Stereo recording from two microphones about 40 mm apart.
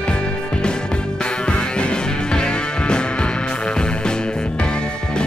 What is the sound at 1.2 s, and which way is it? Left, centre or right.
Music, left.